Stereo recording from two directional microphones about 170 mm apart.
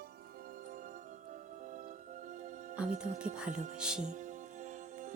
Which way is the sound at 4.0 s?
45° right (ahead or behind).